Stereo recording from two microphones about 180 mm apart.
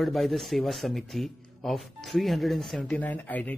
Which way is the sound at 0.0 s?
Centre (ahead or behind).